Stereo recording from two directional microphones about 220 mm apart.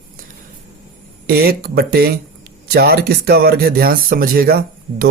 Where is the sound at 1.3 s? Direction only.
45° right (ahead or behind).